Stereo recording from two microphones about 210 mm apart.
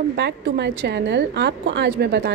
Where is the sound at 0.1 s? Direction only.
55° right (ahead or behind).